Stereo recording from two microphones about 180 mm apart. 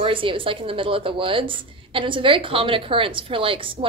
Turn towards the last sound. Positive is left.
turn(degrees=-30)  # may be behind; listen again after turning